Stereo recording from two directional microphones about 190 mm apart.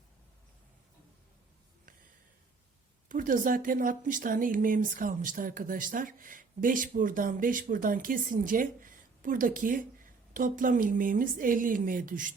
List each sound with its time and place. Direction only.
3.1 s speech: 45° right (ahead or behind)